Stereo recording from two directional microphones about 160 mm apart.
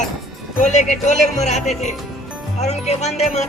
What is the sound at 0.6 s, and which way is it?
Music, 50° left (ahead or behind).